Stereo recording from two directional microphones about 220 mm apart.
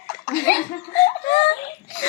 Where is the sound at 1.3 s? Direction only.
30° left (ahead or behind).